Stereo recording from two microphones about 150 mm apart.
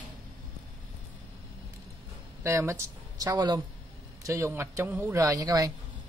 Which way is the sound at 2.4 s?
20° right (ahead or behind).